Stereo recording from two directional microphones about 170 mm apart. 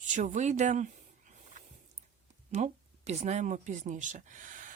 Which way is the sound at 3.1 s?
40° right (ahead or behind).